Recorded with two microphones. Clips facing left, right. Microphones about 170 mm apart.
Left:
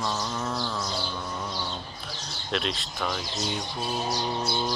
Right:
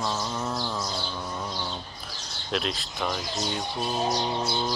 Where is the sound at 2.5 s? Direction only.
Centre (ahead or behind).